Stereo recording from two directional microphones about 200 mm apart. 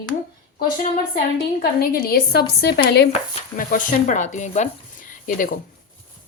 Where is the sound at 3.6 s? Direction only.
40° left (ahead or behind).